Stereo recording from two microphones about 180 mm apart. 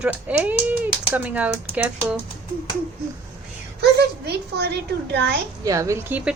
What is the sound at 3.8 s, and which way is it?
Speech, 65° right (ahead or behind).